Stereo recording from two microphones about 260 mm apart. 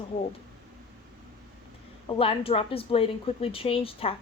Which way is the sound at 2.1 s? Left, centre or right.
Left.